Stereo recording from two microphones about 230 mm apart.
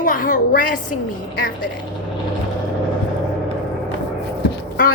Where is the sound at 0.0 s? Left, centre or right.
Left.